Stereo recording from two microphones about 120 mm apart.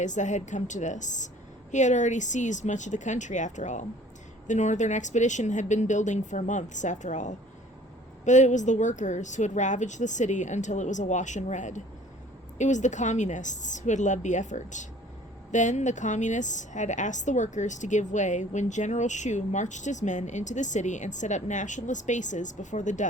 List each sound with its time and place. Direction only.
0.0 s a woman's voice: 90° left